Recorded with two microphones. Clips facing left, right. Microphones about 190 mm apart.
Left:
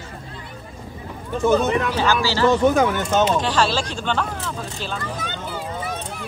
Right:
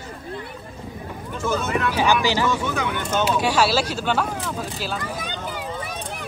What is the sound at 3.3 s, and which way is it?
Speech, 10° right (ahead or behind).